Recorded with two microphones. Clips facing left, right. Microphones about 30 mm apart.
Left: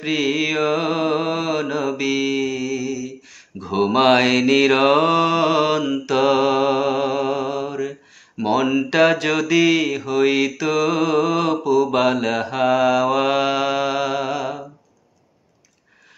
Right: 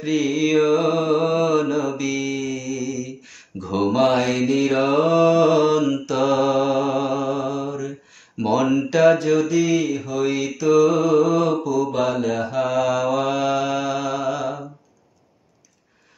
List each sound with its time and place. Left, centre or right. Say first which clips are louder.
0.0 s mantra: even; left
3.5 s speech: right 1 dB; centre
4.0 s mantra: left 5 dB; left
8.4 s speech: even; centre
9.1 s mantra: even; left
10.7 s mantra: right 5 dB; left
12.6 s mantra: left 6 dB; left